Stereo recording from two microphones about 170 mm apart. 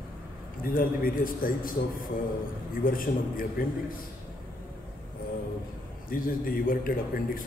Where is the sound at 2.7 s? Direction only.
55° left (ahead or behind).